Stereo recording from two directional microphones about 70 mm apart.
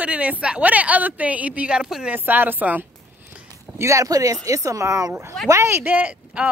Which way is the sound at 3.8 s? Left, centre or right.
Right.